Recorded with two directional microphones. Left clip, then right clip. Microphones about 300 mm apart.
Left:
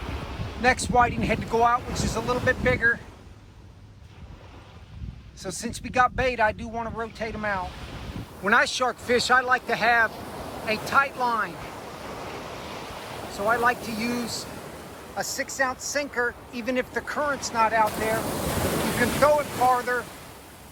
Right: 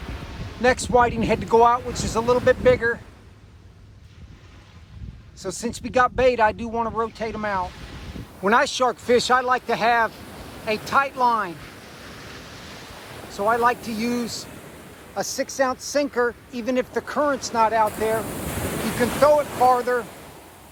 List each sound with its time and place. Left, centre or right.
0.0 s a sound: left
0.6 s speech: centre
5.4 s speech: centre
12.6 s waves: left
13.4 s speech: centre
18.3 s ocean: centre
19.0 s speech: centre